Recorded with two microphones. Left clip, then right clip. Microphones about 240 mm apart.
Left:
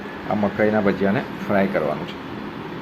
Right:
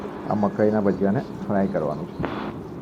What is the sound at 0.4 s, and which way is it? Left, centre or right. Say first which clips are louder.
Speech: left 2 dB; centre.